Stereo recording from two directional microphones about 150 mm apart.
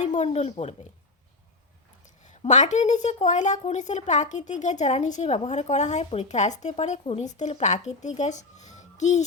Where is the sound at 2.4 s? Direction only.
55° left (ahead or behind).